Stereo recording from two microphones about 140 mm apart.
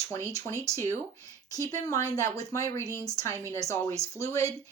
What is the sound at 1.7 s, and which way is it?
Speech, 20° left (ahead or behind).